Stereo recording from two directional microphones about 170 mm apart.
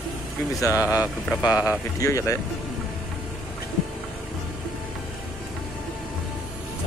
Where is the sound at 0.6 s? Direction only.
20° left (ahead or behind).